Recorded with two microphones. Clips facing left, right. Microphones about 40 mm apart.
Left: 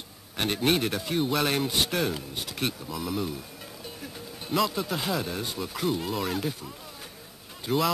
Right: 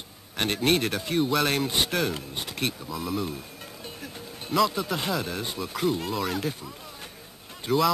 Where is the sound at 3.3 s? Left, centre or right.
Centre.